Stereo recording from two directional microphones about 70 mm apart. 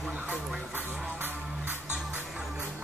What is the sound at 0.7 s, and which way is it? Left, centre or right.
Music, right.